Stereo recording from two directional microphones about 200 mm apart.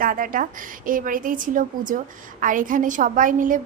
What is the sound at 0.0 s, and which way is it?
A woman's voice, 45° right (ahead or behind).